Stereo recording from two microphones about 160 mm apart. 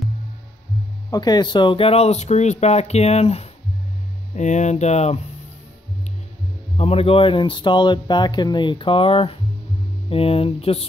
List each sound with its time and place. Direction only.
1.1 s speech: 25° left (ahead or behind); by 5.2 s 45° left (ahead or behind)
6.8 s speech: 40° left (ahead or behind)